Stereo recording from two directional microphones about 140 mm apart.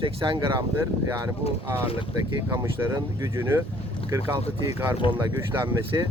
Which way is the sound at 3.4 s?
15° right (ahead or behind).